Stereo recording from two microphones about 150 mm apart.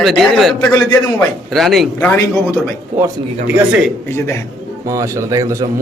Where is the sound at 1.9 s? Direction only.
10° left (ahead or behind).